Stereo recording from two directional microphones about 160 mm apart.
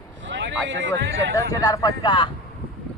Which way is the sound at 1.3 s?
20° left (ahead or behind).